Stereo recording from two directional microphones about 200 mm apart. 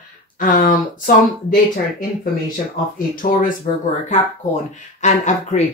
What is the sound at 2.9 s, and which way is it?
Speech, 45° left (ahead or behind).